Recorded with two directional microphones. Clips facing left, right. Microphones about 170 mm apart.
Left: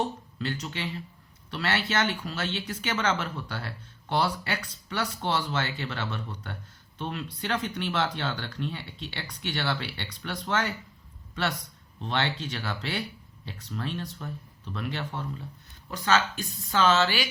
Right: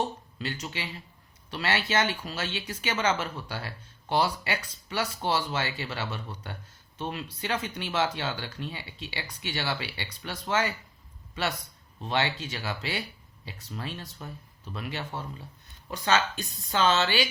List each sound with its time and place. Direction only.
0.3 s speech: 10° right (ahead or behind)
11.9 s speech: 10° right (ahead or behind)